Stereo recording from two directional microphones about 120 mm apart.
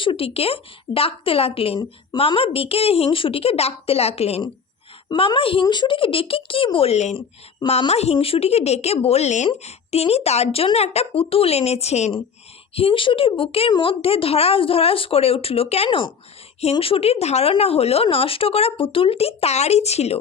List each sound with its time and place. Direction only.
0.0 s a woman's voice: 50° left (ahead or behind)
5.0 s a woman's voice: 45° left (ahead or behind); by 9.5 s 75° left (ahead or behind)
9.6 s speech: 60° left (ahead or behind)
12.7 s a woman's voice: 50° left (ahead or behind)